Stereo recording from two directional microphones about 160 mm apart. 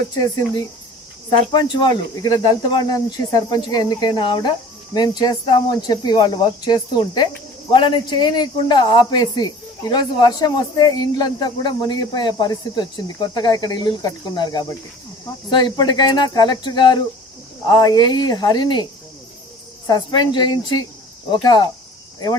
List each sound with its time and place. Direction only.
0.1 s a man's voice: 25° left (ahead or behind)
19.9 s a man's voice: 25° left (ahead or behind)